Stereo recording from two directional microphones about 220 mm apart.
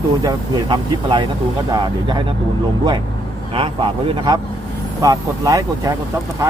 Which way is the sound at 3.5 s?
20° right (ahead or behind).